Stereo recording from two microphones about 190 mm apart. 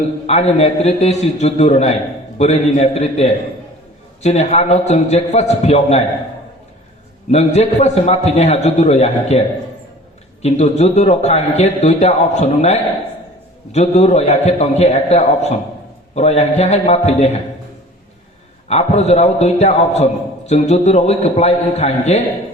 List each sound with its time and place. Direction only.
0.3 s a man's voice: 35° left (ahead or behind)
7.3 s a man's voice: 35° left (ahead or behind)
10.4 s a man's voice: 35° left (ahead or behind)
18.7 s a man's voice: 35° left (ahead or behind)